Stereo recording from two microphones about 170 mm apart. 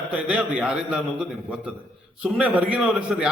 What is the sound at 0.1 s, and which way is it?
A man's voice, 5° right (ahead or behind).